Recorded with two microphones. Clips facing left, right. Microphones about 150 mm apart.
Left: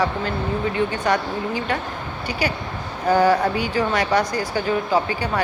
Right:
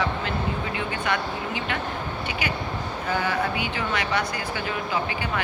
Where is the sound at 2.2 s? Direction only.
35° left (ahead or behind).